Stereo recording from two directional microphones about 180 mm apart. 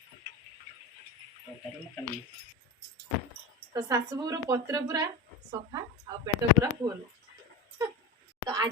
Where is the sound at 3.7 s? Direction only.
20° right (ahead or behind).